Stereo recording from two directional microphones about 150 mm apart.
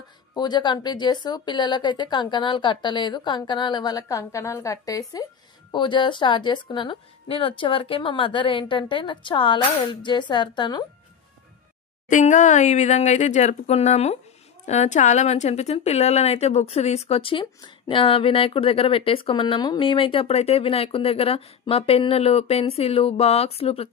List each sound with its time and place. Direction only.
0.3 s speech: 30° left (ahead or behind)
12.1 s speech: 55° left (ahead or behind)